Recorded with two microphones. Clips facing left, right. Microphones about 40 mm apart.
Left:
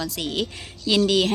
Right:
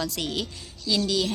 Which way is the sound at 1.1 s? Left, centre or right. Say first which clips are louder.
Left 5 dB; left.